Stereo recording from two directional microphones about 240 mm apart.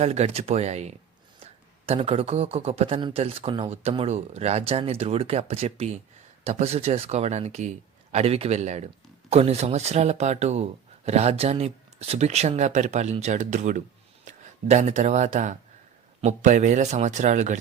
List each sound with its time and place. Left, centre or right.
0.0 s speech: right